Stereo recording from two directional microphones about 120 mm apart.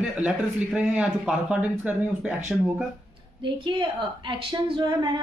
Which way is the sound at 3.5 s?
45° right (ahead or behind).